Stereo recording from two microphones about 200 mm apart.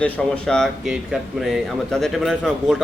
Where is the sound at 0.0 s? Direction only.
5° left (ahead or behind).